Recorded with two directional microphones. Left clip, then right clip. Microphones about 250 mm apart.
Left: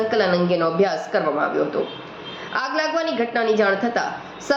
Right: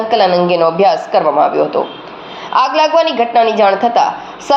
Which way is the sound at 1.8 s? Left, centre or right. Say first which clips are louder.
Right 8 dB; right.